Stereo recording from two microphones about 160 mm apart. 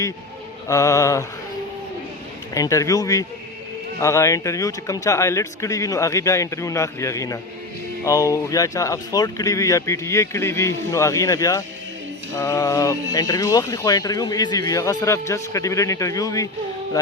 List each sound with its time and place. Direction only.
0.7 s speech: 20° left (ahead or behind)
2.6 s speech: 20° left (ahead or behind)